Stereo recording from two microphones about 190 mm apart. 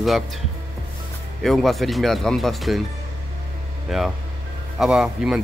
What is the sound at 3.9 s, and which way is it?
Speech, centre (ahead or behind).